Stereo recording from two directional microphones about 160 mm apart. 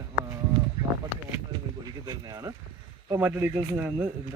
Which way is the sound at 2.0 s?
25° right (ahead or behind).